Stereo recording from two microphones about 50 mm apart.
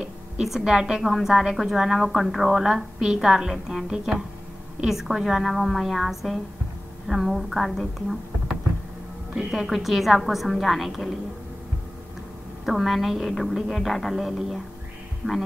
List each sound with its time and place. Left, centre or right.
0.0 s a woman's voice: centre
9.3 s a woman's voice: centre
12.6 s a woman's voice: centre
15.2 s speech: right